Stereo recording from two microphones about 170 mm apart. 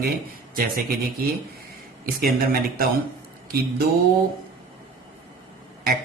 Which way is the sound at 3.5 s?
65° right (ahead or behind).